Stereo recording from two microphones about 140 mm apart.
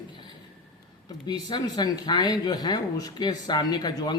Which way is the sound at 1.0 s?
30° left (ahead or behind).